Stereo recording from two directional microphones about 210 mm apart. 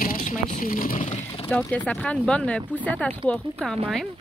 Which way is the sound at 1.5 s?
5° left (ahead or behind).